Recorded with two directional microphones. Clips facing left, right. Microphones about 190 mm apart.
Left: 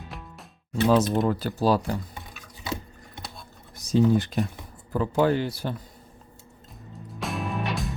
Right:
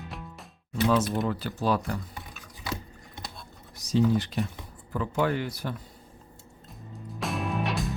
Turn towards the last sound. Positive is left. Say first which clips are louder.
# even
turn(degrees=0)  # may be behind; listen again after turning